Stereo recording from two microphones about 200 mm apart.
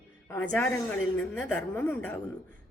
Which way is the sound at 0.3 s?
10° left (ahead or behind).